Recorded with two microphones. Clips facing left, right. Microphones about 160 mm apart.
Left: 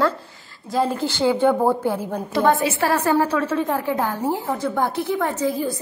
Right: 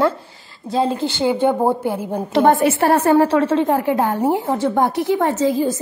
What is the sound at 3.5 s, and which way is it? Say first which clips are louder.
A woman's voice: right 5 dB; 25° right (ahead or behind).